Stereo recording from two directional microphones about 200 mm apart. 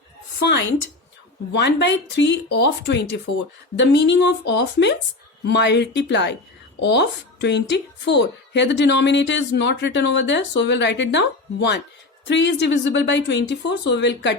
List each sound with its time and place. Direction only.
0.3 s a woman's voice: 60° left (ahead or behind)